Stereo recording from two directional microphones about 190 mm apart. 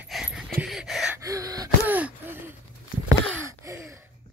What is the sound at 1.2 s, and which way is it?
Gasp, 15° right (ahead or behind).